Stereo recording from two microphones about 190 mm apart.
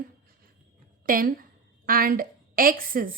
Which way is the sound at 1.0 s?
45° right (ahead or behind).